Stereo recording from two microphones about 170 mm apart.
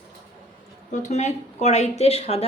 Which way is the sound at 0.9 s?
45° left (ahead or behind).